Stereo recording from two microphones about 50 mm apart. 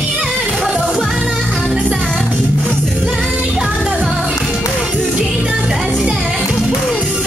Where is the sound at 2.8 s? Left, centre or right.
Centre.